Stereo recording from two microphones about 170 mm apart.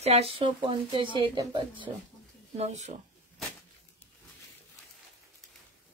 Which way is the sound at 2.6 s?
45° right (ahead or behind).